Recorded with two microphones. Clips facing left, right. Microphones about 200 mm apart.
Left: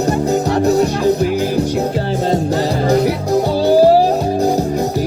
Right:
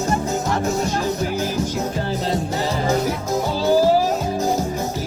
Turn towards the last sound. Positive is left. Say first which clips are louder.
# left 6 dB
turn(degrees=35)  # may be behind; listen again after turning